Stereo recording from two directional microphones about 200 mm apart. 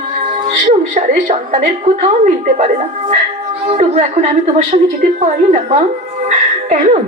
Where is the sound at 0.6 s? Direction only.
40° right (ahead or behind).